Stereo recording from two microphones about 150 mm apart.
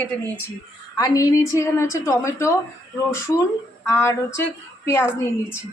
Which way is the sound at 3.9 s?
20° left (ahead or behind).